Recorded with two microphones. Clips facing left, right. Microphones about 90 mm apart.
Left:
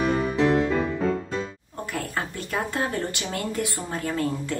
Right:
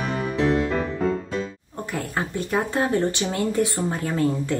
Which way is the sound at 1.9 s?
20° right (ahead or behind).